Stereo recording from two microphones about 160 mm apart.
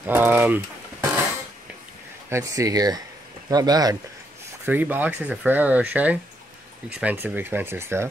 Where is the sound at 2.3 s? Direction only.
20° right (ahead or behind).